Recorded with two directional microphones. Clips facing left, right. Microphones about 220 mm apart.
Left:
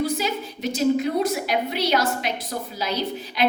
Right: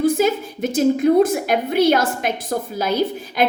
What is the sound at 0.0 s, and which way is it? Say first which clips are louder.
A woman's voice: right 8 dB; 50° right (ahead or behind).